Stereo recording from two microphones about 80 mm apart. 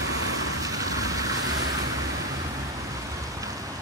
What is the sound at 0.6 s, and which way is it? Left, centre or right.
Vehicle, right.